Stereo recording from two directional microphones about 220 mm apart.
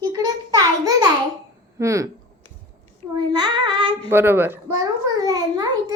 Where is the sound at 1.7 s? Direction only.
15° right (ahead or behind).